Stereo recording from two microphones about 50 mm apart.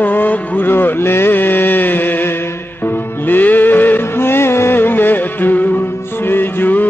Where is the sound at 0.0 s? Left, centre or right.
Left.